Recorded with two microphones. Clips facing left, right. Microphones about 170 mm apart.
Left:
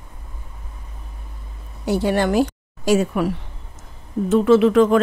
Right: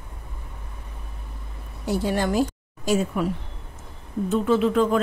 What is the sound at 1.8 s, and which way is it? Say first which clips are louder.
A woman's voice: left 5 dB; 70° left (ahead or behind).